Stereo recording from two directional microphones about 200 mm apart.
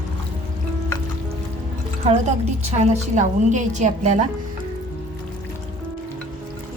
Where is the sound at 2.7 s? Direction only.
35° right (ahead or behind).